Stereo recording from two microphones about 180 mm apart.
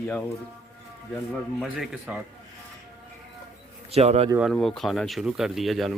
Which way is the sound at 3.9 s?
35° right (ahead or behind).